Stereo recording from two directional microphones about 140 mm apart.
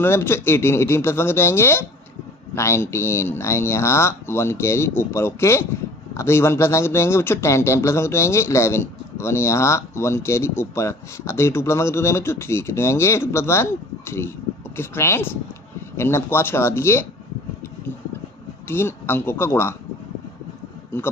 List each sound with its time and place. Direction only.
0.0 s speech: 15° left (ahead or behind)
18.7 s speech: 15° left (ahead or behind)